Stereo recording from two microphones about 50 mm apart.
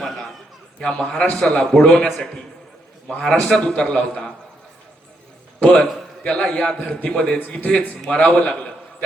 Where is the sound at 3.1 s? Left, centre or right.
Centre.